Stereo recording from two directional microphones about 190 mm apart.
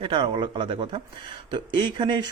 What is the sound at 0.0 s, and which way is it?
Speech, 25° right (ahead or behind).